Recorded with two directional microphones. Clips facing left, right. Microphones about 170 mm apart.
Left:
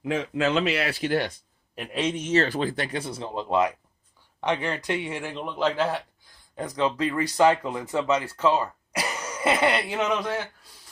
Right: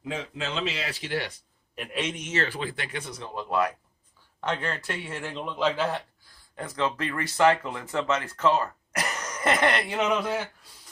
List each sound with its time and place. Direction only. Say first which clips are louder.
0.1 s speech: left 8 dB; 65° left (ahead or behind)
2.1 s speech: left 7 dB; 35° left (ahead or behind); by 10.4 s centre (ahead or behind)